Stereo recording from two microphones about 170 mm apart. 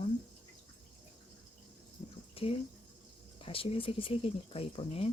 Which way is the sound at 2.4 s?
35° left (ahead or behind).